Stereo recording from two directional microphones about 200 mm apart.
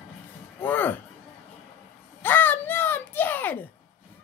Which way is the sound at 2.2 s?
10° left (ahead or behind).